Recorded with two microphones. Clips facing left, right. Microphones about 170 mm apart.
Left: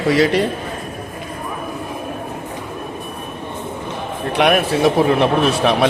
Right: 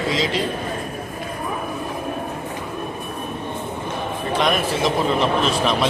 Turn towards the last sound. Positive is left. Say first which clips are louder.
# left 4 dB
turn(degrees=65)  # may be behind; listen again after turning